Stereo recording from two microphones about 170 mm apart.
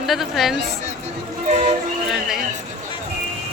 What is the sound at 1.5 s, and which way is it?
Music, 40° right (ahead or behind).